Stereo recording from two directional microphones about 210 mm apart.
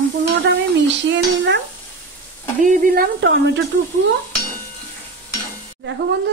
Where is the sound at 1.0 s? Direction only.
55° right (ahead or behind).